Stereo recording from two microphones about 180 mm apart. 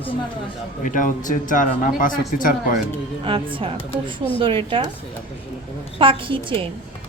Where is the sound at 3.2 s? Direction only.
30° right (ahead or behind).